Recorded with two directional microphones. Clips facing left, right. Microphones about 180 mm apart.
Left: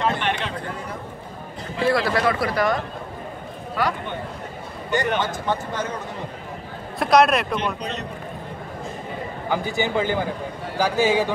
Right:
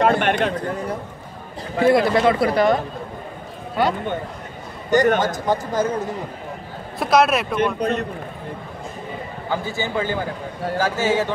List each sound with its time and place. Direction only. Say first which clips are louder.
0.0 s speech: right 6 dB; 50° right (ahead or behind)
1.9 s speech: right 5 dB; 20° right (ahead or behind)
4.9 s a man's voice: right 6 dB; 45° right (ahead or behind)
7.0 s a man's voice: even; centre (ahead or behind)
7.5 s speech: right 6 dB; 50° right (ahead or behind)
9.5 s speech: left 1 dB; 15° left (ahead or behind)